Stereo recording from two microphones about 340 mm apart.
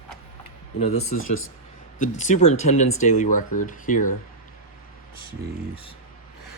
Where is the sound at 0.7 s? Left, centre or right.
Centre.